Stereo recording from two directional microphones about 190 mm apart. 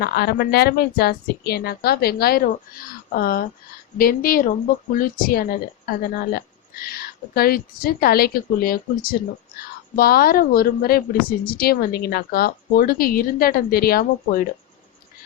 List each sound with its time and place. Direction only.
0.0 s a woman's voice: 55° left (ahead or behind)